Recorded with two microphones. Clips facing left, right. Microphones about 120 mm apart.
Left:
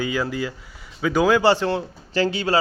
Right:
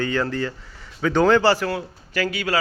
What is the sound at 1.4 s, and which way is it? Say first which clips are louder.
A man's voice: left 1 dB; 25° left (ahead or behind).